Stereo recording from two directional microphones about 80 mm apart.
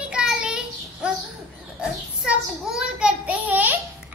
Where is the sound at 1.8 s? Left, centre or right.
Centre.